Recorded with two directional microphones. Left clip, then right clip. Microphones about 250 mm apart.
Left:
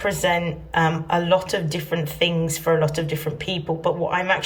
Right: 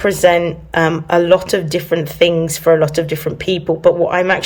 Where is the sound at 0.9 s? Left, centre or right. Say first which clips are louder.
Right 8 dB; centre.